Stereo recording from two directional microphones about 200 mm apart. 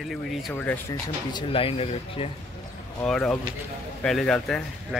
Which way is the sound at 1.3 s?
25° left (ahead or behind).